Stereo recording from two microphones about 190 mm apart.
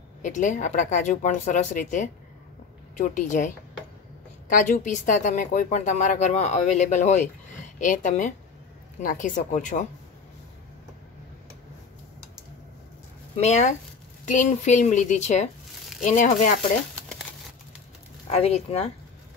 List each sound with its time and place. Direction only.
0.2 s speech: 40° left (ahead or behind)
13.4 s speech: 40° left (ahead or behind)
18.3 s speech: 35° left (ahead or behind)